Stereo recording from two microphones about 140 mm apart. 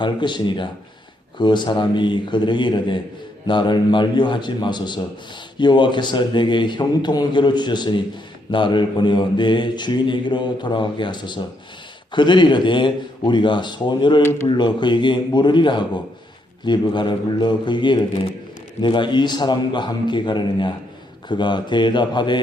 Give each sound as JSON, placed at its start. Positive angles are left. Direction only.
{"t": 0.0, "sound": "mantra", "side_deg": 35}